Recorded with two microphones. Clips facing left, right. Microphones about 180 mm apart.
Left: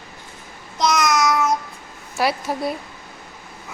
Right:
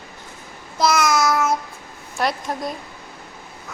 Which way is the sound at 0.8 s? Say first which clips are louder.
Right 1 dB; 5° right (ahead or behind).